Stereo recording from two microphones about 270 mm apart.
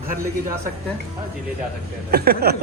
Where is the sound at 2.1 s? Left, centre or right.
Right.